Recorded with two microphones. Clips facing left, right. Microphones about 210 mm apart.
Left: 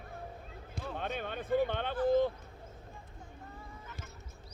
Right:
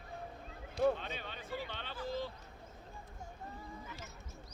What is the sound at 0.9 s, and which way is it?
Speech, 55° left (ahead or behind).